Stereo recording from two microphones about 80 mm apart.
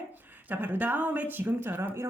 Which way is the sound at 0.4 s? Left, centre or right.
Right.